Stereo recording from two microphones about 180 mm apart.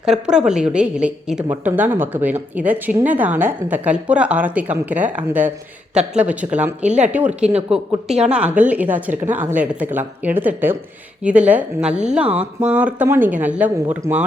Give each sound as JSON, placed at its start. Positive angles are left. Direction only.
{"t": 0.0, "sound": "a woman's voice", "side_deg": -5}
{"t": 6.8, "sound": "speech", "side_deg": -40}
{"t": 7.1, "sound": "a woman's voice", "side_deg": -5}